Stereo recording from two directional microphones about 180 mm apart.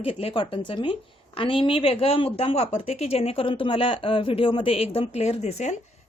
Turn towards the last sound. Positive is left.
turn(degrees=40)  # may be behind; listen again after turning